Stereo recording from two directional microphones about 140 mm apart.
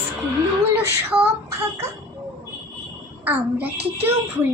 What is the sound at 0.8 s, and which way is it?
Child singing, 20° right (ahead or behind).